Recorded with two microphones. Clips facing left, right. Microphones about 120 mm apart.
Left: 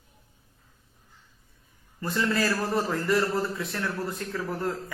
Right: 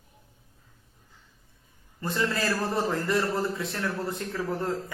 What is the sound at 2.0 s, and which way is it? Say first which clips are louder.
A man's voice: left 2 dB; 25° right (ahead or behind).